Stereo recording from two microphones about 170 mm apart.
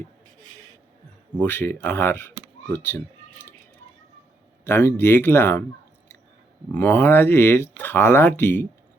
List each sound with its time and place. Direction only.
1.4 s speech: 10° left (ahead or behind)
4.6 s speech: 15° left (ahead or behind)
6.7 s speech: 10° left (ahead or behind)